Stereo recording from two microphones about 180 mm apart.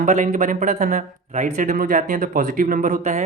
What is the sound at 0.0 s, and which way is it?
Speech, 45° right (ahead or behind).